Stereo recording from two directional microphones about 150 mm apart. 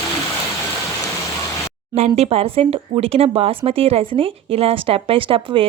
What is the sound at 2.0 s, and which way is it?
A woman's voice, 45° right (ahead or behind).